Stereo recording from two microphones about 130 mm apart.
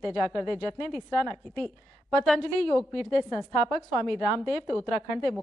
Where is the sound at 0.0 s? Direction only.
5° left (ahead or behind).